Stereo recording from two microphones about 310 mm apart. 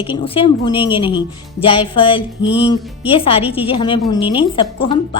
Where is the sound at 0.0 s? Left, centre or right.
Centre.